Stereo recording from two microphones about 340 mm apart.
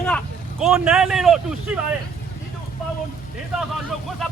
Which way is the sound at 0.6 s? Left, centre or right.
Centre.